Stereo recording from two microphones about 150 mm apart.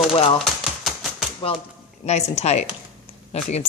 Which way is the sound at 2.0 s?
45° left (ahead or behind).